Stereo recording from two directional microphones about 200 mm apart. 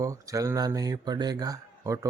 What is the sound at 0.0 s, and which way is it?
Speech, 15° right (ahead or behind).